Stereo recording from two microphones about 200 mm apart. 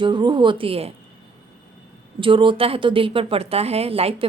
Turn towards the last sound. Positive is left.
turn(degrees=-30)  # may be behind; listen again after turning